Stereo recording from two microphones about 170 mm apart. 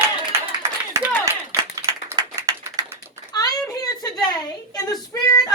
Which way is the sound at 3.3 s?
20° left (ahead or behind).